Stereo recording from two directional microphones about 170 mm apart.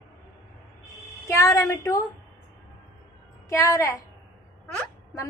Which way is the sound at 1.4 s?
15° left (ahead or behind).